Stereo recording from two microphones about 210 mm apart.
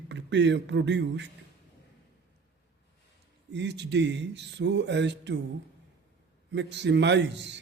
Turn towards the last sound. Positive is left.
turn(degrees=-55)  # may be behind; listen again after turning